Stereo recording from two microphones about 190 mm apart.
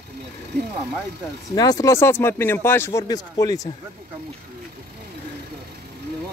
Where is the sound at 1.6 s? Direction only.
20° left (ahead or behind).